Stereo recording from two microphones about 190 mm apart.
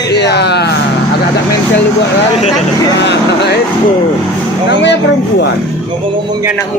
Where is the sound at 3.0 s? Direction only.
65° left (ahead or behind).